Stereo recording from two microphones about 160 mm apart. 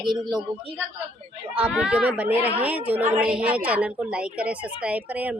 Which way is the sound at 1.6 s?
5° right (ahead or behind).